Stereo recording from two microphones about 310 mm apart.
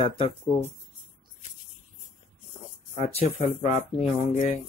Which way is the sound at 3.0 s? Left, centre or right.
Left.